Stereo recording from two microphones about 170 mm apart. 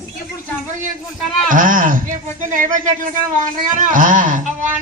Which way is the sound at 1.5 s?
50° right (ahead or behind).